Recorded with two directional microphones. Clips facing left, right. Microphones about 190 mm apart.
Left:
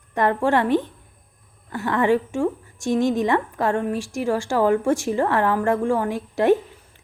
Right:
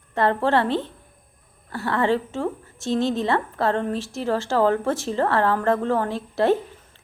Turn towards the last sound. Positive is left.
turn(degrees=15)  # may be behind; listen again after turning